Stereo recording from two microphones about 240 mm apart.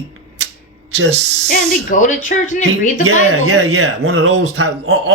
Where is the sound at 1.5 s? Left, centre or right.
Left.